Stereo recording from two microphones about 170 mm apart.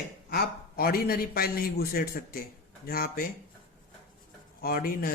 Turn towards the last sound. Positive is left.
turn(degrees=60)  # may be behind; listen again after turning